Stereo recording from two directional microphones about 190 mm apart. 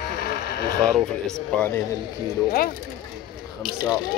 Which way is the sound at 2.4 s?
55° left (ahead or behind).